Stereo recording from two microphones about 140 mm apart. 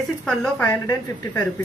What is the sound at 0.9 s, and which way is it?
Speech, 25° left (ahead or behind).